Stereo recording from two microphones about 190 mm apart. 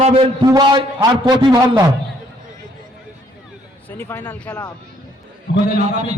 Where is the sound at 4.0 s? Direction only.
10° left (ahead or behind).